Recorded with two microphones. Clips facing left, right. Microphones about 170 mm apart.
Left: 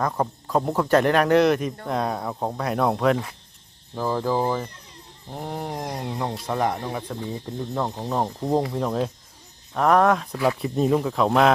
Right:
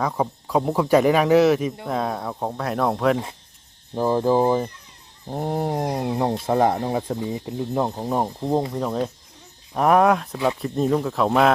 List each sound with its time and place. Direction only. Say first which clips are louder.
0.0 s speech: right 1 dB; 5° right (ahead or behind)
3.9 s fowl: right 5 dB; 20° right (ahead or behind)
5.3 s a sound: right 7 dB; 30° right (ahead or behind)
6.4 s fowl: right 5 dB; 25° right (ahead or behind)
7.2 s speech: right 3 dB; 10° right (ahead or behind)
8.4 s speech: even; centre (ahead or behind)
10.3 s fowl: even; 20° right (ahead or behind)
10.6 s speech: even; centre (ahead or behind)